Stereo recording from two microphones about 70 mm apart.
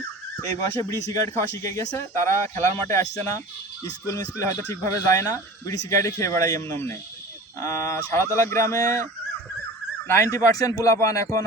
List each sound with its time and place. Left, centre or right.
0.9 s speech: left
6.6 s speech: left
10.1 s speech: left